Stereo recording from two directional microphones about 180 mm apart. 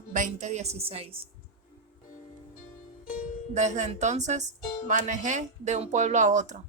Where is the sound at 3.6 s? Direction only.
40° right (ahead or behind).